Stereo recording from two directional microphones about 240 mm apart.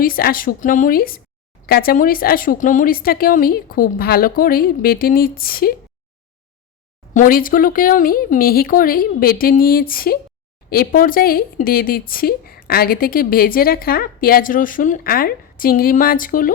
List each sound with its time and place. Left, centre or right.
0.0 s speech: left
7.1 s speech: left